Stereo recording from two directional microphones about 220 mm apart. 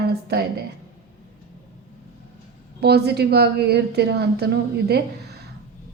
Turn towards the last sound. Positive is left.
turn(degrees=-45)  # may be behind; listen again after turning